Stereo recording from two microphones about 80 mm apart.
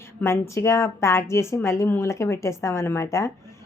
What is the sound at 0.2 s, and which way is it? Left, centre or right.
A woman's voice, left.